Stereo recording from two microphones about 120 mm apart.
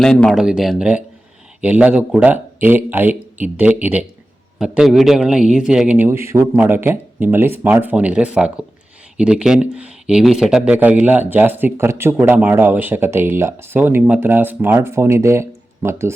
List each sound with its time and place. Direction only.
0.0 s a man's voice: 5° left (ahead or behind); by 6.1 s 10° right (ahead or behind)
6.1 s speech: 20° right (ahead or behind)